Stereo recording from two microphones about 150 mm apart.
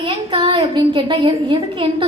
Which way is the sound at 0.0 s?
35° right (ahead or behind).